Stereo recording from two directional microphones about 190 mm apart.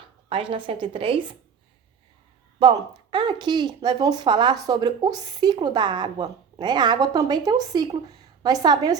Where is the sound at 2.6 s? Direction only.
25° right (ahead or behind).